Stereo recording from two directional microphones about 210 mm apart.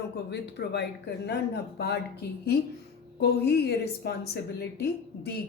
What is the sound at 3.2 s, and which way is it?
A woman's voice, 50° left (ahead or behind).